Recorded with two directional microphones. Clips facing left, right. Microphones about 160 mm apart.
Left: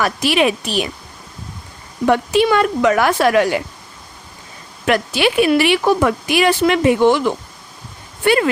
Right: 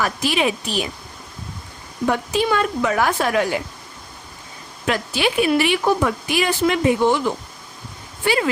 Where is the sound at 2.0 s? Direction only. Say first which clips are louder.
Left 6 dB; 70° left (ahead or behind).